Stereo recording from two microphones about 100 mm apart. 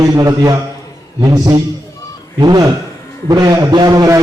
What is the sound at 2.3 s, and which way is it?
Speech, 45° right (ahead or behind).